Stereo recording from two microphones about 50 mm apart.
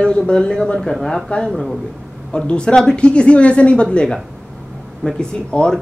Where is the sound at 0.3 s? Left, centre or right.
Centre.